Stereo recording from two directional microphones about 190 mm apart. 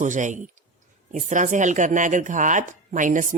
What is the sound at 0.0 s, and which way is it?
Speech, 40° right (ahead or behind).